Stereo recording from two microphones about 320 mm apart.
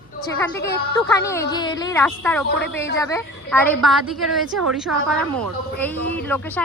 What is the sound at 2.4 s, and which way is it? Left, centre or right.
Speech, left.